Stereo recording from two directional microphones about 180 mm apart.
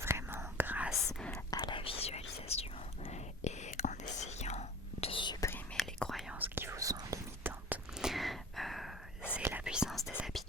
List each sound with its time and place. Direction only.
0.0 s whispering: 15° right (ahead or behind)
1.5 s whispering: 25° left (ahead or behind)
5.7 s whispering: centre (ahead or behind)
6.4 s whispering: 10° right (ahead or behind)
9.4 s whispering: 10° right (ahead or behind)